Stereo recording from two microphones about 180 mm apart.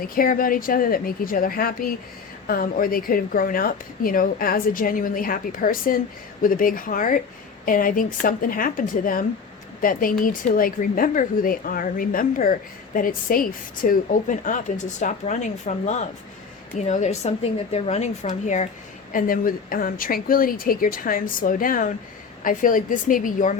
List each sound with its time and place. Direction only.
0.0 s a woman's voice: 55° left (ahead or behind)